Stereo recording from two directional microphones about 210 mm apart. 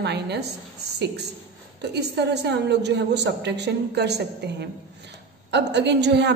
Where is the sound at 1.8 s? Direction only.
55° right (ahead or behind).